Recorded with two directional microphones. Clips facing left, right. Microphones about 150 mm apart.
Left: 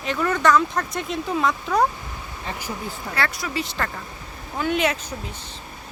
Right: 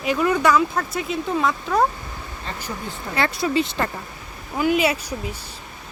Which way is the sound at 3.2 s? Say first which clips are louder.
Right 6 dB; 20° right (ahead or behind).